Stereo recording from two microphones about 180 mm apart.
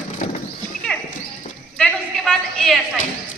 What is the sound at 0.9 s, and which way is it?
Clip-clop, 5° left (ahead or behind).